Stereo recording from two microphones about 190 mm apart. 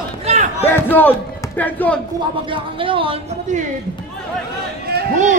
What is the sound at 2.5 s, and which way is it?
Speech, 25° right (ahead or behind).